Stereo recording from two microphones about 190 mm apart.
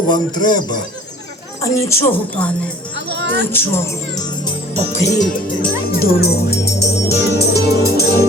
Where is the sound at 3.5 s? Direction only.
10° left (ahead or behind).